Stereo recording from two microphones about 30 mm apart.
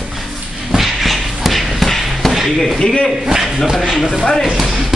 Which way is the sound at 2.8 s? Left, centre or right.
Left.